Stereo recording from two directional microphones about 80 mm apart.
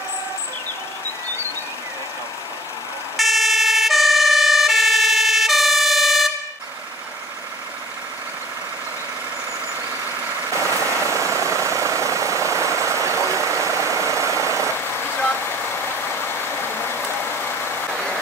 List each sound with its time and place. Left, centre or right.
3.2 s emergency vehicle: centre
10.5 s vehicle: right
15.4 s vehicle: left